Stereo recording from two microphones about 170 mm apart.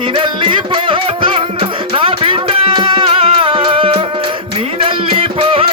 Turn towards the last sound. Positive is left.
turn(degrees=-30)  # may be behind; listen again after turning